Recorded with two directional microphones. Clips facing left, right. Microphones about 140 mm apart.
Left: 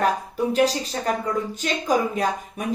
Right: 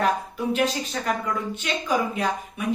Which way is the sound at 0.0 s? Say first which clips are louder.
Left 2 dB; 35° left (ahead or behind).